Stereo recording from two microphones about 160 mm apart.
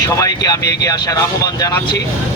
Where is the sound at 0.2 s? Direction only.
20° left (ahead or behind).